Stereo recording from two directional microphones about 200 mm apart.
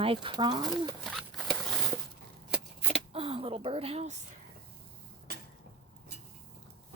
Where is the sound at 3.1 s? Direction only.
30° right (ahead or behind).